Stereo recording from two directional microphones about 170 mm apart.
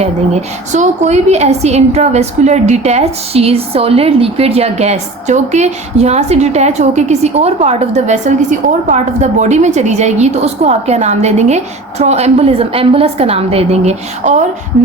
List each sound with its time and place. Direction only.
0.7 s a woman's voice: 45° right (ahead or behind)